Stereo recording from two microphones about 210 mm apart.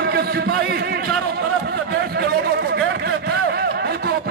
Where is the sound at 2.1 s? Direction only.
50° right (ahead or behind).